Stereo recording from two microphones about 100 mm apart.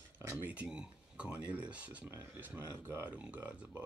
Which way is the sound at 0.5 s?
10° right (ahead or behind).